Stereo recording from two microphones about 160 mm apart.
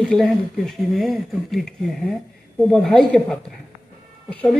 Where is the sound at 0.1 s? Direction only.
Centre (ahead or behind).